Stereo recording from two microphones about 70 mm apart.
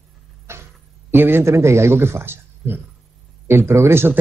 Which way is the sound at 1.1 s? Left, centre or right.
Right.